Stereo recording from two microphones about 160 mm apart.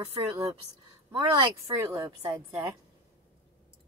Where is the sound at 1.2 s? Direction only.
20° right (ahead or behind).